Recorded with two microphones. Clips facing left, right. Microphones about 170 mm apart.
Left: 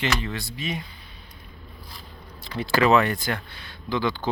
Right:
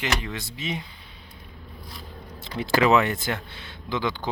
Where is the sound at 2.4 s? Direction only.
20° right (ahead or behind).